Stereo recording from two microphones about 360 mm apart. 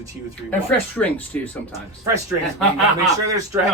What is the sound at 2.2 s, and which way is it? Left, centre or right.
Speech, centre.